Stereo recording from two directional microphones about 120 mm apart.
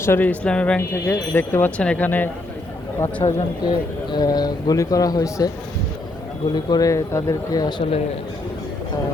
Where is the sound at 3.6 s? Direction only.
35° left (ahead or behind).